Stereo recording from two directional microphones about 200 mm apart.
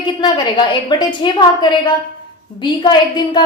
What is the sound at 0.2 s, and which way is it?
A woman's voice, 25° left (ahead or behind).